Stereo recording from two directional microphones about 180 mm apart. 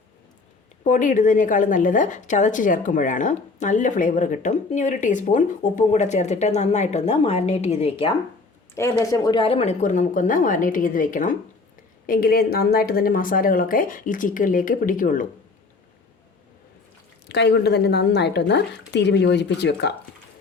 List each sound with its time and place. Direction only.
0.9 s a woman's voice: 45° left (ahead or behind)
8.7 s a woman's voice: 15° left (ahead or behind); by 15.3 s 50° left (ahead or behind)
17.2 s speech: 70° left (ahead or behind)